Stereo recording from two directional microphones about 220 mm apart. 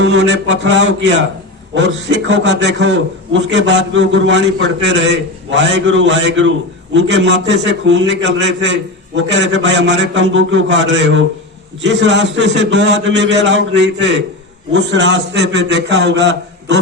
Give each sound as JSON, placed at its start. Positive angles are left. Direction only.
{"t": 0.0, "sound": "a man's voice", "side_deg": -55}